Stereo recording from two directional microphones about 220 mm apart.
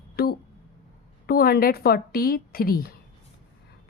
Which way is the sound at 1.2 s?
45° left (ahead or behind).